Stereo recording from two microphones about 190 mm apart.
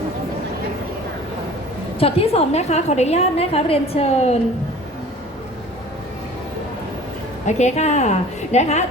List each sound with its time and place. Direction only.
2.0 s a woman's voice: 30° left (ahead or behind)
7.4 s a woman's voice: 40° left (ahead or behind)